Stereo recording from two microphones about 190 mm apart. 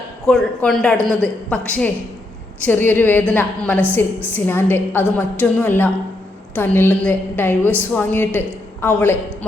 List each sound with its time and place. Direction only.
0.3 s a woman's voice: 5° left (ahead or behind)